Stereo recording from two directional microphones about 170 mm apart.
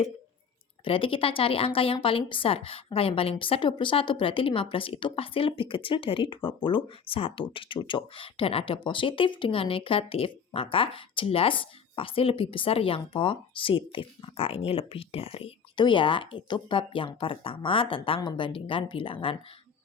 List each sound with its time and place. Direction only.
0.9 s speech: 30° left (ahead or behind)